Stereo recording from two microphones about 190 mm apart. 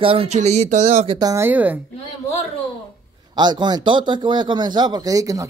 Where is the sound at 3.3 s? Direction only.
20° right (ahead or behind).